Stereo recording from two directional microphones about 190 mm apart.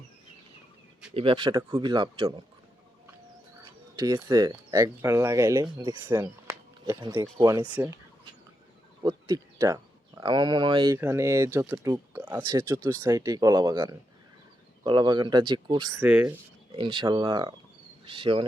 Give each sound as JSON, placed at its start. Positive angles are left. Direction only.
{"t": 1.1, "sound": "speech", "side_deg": -30}
{"t": 3.9, "sound": "speech", "side_deg": -20}
{"t": 16.7, "sound": "speech", "side_deg": -25}